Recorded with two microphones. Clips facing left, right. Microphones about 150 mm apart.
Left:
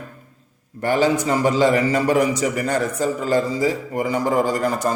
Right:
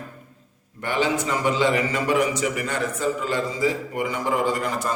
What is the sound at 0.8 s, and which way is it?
A man's voice, 40° left (ahead or behind).